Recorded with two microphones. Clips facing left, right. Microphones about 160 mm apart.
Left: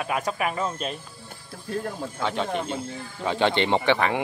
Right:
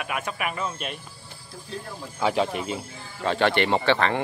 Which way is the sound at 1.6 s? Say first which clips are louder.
Left 7 dB; 50° left (ahead or behind).